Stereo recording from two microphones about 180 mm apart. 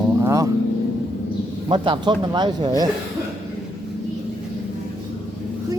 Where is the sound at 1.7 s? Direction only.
30° right (ahead or behind).